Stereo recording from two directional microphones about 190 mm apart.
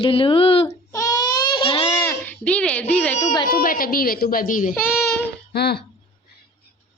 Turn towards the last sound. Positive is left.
turn(degrees=60)  # may be behind; listen again after turning